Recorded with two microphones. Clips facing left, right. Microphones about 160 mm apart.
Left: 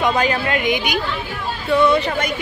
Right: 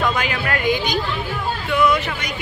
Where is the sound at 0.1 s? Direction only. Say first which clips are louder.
Left 5 dB; 35° left (ahead or behind).